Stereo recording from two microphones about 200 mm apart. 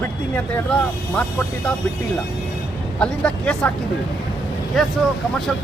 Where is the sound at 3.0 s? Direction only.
5° left (ahead or behind).